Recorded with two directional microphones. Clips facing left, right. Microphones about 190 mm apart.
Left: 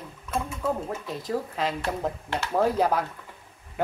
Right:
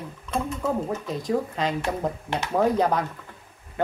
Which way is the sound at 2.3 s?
15° right (ahead or behind).